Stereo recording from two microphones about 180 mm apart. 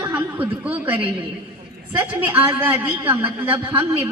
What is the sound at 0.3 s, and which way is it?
Speech, 10° right (ahead or behind).